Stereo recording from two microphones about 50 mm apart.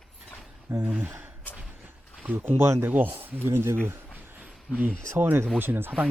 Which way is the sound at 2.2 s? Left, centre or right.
Right.